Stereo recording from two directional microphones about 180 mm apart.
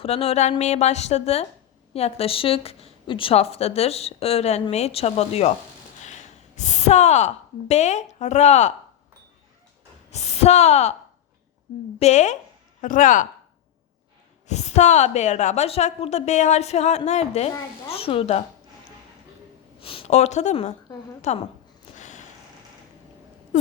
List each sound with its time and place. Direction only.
0.0 s a woman's voice: 35° left (ahead or behind)
10.1 s speech: 35° left (ahead or behind)
11.9 s a woman's voice: 40° left (ahead or behind)
14.4 s a woman's voice: 40° left (ahead or behind)
19.8 s a woman's voice: 30° left (ahead or behind)
21.9 s a sound: 45° left (ahead or behind)